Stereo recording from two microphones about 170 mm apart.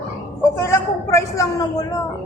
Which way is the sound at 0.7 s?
20° left (ahead or behind).